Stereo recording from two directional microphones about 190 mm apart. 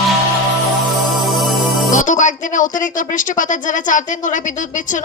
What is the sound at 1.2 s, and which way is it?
Music, centre (ahead or behind).